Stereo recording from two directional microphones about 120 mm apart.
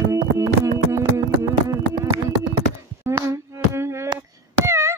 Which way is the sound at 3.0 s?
20° right (ahead or behind).